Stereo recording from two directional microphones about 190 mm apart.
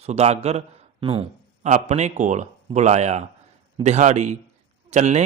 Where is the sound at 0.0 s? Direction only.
35° right (ahead or behind).